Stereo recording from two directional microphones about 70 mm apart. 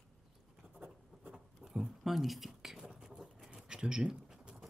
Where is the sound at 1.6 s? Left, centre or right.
Centre.